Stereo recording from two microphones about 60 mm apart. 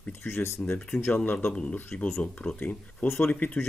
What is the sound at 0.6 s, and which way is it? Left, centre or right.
Speech, left.